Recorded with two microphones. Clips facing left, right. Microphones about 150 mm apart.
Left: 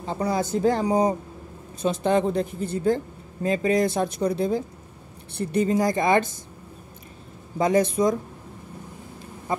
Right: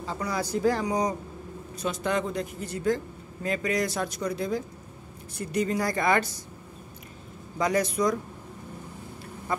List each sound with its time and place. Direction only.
0.0 s speech: 25° left (ahead or behind)
7.5 s speech: 25° left (ahead or behind)
9.5 s a sound: 20° left (ahead or behind)